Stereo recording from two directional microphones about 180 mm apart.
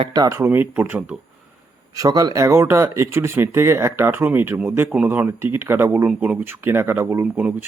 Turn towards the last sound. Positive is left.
turn(degrees=-10)  # may be behind; listen again after turning